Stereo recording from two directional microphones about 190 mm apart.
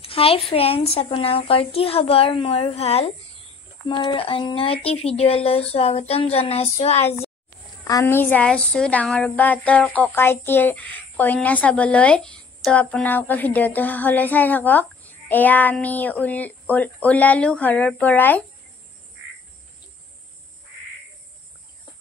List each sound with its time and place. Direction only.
0.0 s a sound: 30° left (ahead or behind)
0.5 s a child's voice: 30° left (ahead or behind)
7.8 s child singing: 15° left (ahead or behind)